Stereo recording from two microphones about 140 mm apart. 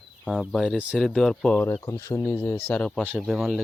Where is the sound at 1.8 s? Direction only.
20° left (ahead or behind).